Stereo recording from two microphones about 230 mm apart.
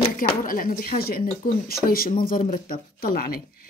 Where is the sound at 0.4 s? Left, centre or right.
Left.